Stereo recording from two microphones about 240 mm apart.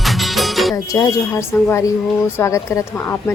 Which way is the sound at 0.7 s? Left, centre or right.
Centre.